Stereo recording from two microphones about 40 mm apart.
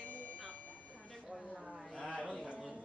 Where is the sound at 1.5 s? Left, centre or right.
Centre.